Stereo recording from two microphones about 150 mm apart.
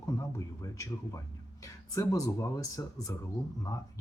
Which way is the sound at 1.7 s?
20° left (ahead or behind).